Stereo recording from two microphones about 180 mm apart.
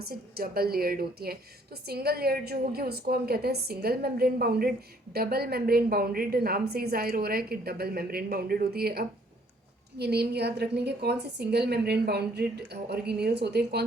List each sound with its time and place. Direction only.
0.0 s a woman's voice: 55° right (ahead or behind)